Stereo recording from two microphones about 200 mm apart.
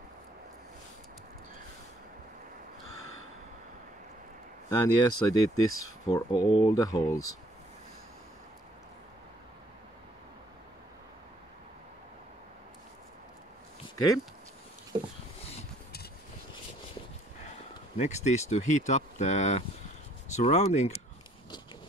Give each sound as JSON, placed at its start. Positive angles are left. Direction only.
{"t": 4.6, "sound": "speech", "side_deg": 20}
{"t": 14.9, "sound": "a sound", "side_deg": -20}
{"t": 17.9, "sound": "speech", "side_deg": 35}